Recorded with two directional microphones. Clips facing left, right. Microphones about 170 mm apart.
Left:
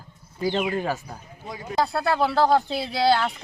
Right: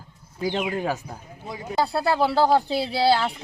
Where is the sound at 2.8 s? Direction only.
30° right (ahead or behind).